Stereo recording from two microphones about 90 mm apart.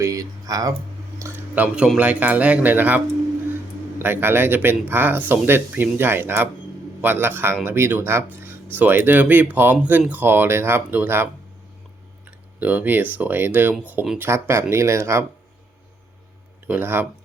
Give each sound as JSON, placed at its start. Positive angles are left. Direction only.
{"t": 0.0, "sound": "speech", "side_deg": -40}
{"t": 1.5, "sound": "speech", "side_deg": -10}
{"t": 12.5, "sound": "speech", "side_deg": -20}
{"t": 16.6, "sound": "speech", "side_deg": -20}